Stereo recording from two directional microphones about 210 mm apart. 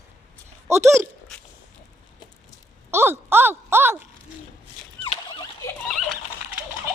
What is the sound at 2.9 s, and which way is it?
Speech, 10° right (ahead or behind).